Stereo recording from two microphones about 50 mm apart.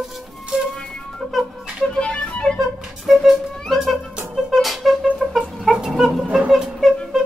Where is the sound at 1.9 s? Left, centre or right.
Centre.